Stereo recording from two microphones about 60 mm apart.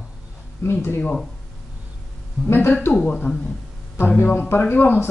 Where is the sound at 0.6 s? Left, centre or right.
Left.